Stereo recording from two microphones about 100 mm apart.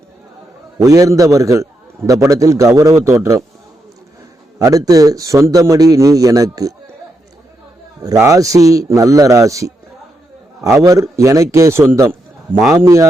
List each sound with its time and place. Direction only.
0.8 s a man's voice: 35° right (ahead or behind)
4.6 s a man's voice: 35° right (ahead or behind)
8.0 s a man's voice: 35° right (ahead or behind)